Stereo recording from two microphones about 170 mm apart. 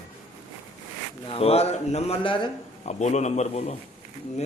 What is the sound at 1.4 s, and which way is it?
A man's voice, 35° left (ahead or behind).